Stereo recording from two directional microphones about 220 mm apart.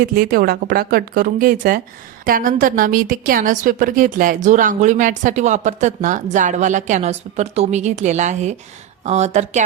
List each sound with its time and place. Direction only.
0.0 s a woman's voice: 40° right (ahead or behind)